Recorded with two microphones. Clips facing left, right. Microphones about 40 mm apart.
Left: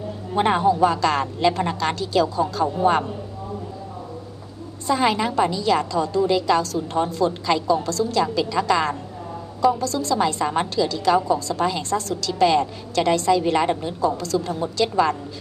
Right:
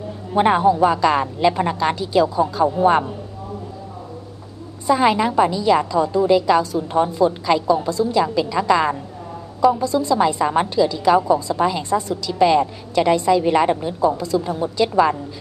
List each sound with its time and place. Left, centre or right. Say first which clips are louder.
0.3 s a woman's voice: right 3 dB; centre
4.8 s a woman's voice: right 4 dB; centre
13.9 s a woman's voice: right 3 dB; centre